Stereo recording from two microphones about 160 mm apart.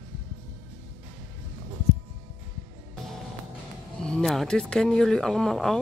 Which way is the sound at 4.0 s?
5° left (ahead or behind).